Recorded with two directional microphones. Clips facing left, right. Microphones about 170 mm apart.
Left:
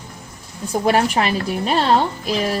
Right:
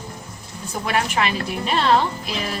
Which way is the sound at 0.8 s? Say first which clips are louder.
Left 5 dB; 40° left (ahead or behind).